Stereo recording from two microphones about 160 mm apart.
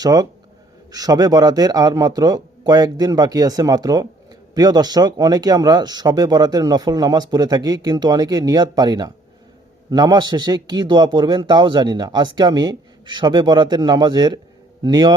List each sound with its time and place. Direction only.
0.0 s speech: 25° right (ahead or behind)